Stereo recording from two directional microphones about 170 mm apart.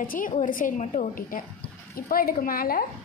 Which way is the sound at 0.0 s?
55° left (ahead or behind).